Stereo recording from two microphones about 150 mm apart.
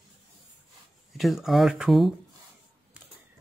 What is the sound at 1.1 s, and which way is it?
Speech, centre (ahead or behind).